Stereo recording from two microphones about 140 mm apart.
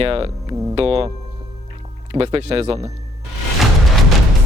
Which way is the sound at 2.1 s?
40° right (ahead or behind).